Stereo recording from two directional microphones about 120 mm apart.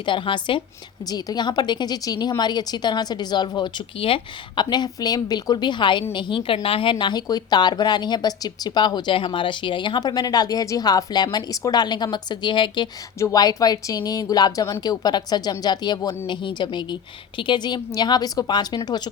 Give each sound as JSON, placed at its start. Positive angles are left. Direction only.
{"t": 0.0, "sound": "a woman's voice", "side_deg": 40}
{"t": 7.0, "sound": "speech", "side_deg": 35}
{"t": 13.1, "sound": "speech", "side_deg": 30}